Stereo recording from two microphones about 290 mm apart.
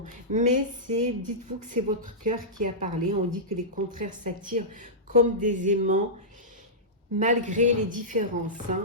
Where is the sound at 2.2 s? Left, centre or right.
Right.